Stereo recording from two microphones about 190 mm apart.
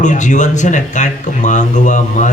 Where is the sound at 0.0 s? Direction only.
40° left (ahead or behind).